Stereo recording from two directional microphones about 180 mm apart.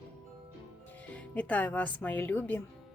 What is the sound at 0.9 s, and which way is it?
Speech, 5° left (ahead or behind).